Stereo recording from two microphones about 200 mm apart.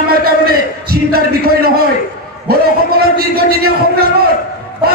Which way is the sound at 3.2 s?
50° right (ahead or behind).